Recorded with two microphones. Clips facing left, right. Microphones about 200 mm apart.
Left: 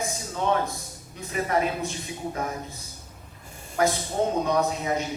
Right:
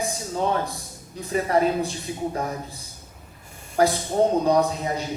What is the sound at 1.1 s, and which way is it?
A man's voice, 35° right (ahead or behind).